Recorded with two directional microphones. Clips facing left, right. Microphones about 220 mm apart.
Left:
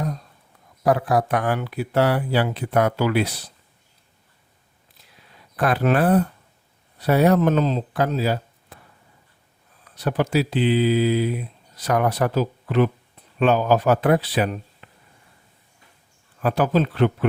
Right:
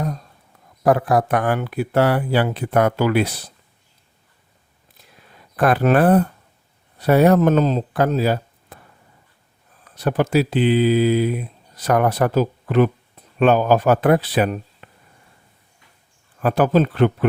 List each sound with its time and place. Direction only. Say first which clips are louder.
0.9 s speech: right 3 dB; 50° right (ahead or behind)
5.1 s a sound: right 2 dB; 55° right (ahead or behind)
7.0 s speech: right 3 dB; 50° right (ahead or behind)
10.0 s speech: right 3 dB; 50° right (ahead or behind)
14.8 s a sound: right 3 dB; 50° right (ahead or behind)
16.4 s speech: right 3 dB; 50° right (ahead or behind)